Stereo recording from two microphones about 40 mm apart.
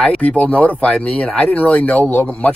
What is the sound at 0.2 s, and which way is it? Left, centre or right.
Speech, left.